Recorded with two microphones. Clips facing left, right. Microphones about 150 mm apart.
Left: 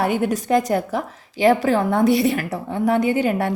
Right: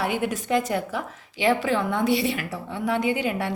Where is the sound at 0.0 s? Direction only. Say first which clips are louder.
Left 5 dB; 45° left (ahead or behind).